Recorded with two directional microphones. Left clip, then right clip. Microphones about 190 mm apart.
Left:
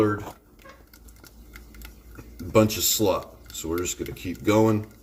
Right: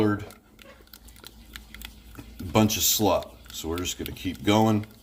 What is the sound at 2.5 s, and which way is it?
Speech, 50° right (ahead or behind).